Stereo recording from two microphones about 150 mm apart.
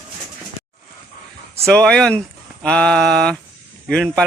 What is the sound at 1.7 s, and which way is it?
Speech, 5° left (ahead or behind).